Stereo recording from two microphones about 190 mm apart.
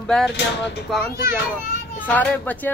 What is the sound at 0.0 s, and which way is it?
Speech, 5° left (ahead or behind).